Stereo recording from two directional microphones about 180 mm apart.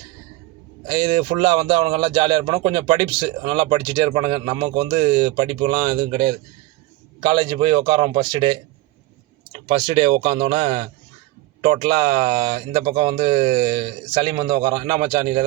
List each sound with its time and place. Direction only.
0.9 s a man's voice: 25° right (ahead or behind)